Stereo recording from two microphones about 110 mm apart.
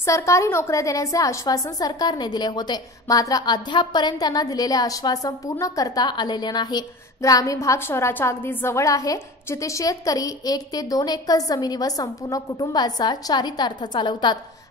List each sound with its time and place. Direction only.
0.0 s a woman's voice: 25° left (ahead or behind); by 14.4 s 45° left (ahead or behind)